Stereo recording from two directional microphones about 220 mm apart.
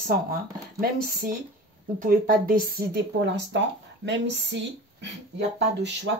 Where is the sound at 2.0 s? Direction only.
40° right (ahead or behind).